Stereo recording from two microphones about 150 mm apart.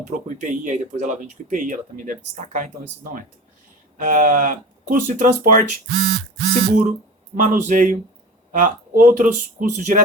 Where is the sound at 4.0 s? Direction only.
60° right (ahead or behind).